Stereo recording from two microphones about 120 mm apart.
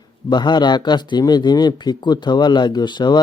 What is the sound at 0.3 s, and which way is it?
A man's voice, 40° left (ahead or behind).